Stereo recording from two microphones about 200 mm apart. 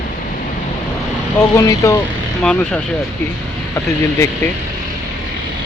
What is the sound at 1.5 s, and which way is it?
Speech, 15° left (ahead or behind).